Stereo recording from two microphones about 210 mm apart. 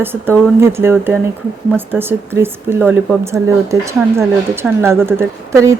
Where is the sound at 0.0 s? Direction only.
10° right (ahead or behind).